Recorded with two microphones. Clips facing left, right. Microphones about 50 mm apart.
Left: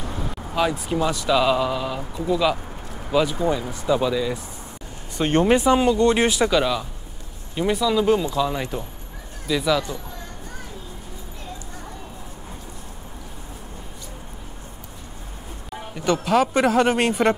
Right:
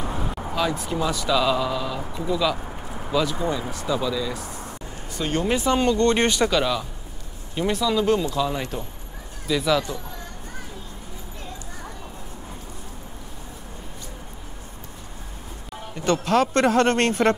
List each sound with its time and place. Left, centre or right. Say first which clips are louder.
0.0 s vehicle: right 2 dB; centre
0.6 s a man's voice: left 3 dB; centre
2.5 s a sound: even; centre
3.1 s a man's voice: left 3 dB; centre
5.1 s speech: left 6 dB; left
5.7 s speech: left 2 dB; centre
15.9 s a man's voice: left 1 dB; centre